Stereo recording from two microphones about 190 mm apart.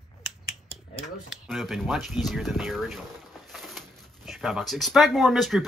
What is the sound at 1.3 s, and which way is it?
Speech, centre (ahead or behind).